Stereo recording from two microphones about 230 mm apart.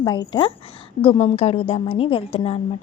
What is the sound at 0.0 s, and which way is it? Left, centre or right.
A woman's voice, centre.